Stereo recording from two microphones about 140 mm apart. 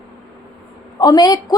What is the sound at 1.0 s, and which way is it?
Speech, 30° left (ahead or behind).